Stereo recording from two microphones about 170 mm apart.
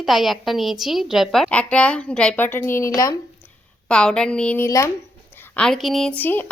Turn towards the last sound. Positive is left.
turn(degrees=10)  # may be behind; listen again after turning